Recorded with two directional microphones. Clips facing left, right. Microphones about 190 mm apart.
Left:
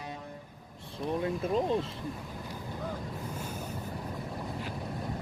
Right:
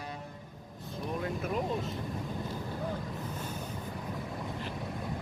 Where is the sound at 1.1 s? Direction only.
30° left (ahead or behind).